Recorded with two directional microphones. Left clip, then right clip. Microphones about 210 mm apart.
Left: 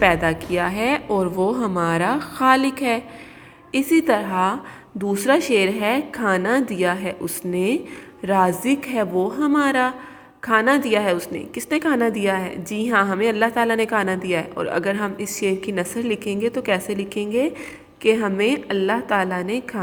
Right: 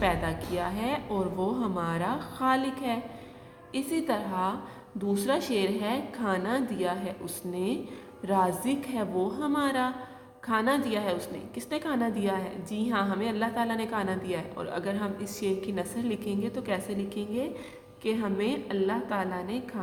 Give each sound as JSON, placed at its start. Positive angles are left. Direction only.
{"t": 0.0, "sound": "a woman's voice", "side_deg": 35}